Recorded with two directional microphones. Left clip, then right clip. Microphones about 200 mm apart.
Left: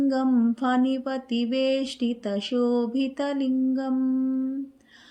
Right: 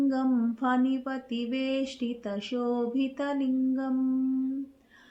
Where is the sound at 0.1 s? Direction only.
45° left (ahead or behind).